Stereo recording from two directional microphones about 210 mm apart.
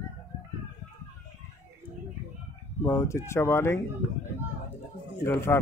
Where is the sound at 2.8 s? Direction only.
15° left (ahead or behind).